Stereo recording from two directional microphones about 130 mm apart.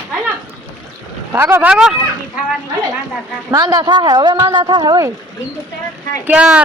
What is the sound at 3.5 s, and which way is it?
A man's voice, 30° right (ahead or behind).